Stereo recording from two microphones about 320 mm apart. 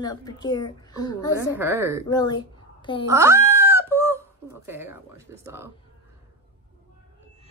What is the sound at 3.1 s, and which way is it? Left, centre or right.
Wail, centre.